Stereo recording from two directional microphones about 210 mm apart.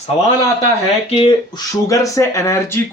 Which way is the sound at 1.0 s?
25° left (ahead or behind).